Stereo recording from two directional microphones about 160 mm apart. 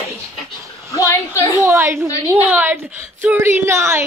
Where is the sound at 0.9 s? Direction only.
20° left (ahead or behind).